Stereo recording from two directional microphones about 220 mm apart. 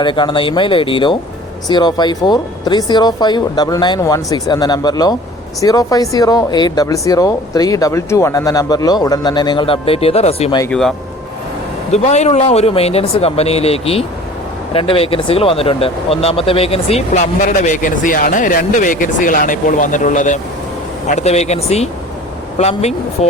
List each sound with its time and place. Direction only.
0.0 s speech: 20° left (ahead or behind)
10.6 s speech: 5° left (ahead or behind)
11.9 s speech: 30° left (ahead or behind)